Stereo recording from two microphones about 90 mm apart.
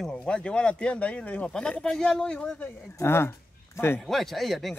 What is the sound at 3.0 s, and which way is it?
Speech, 25° left (ahead or behind).